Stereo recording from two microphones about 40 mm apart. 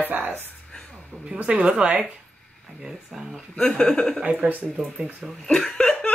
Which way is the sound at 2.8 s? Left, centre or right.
Centre.